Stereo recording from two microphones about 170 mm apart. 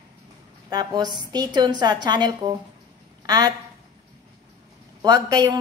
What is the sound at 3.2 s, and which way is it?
Quack, 25° right (ahead or behind).